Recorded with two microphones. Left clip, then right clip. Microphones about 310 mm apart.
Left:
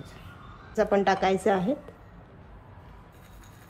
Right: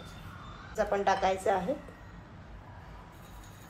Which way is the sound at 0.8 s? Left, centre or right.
Left.